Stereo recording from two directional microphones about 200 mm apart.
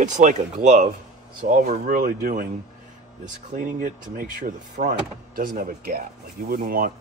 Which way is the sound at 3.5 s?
45° right (ahead or behind).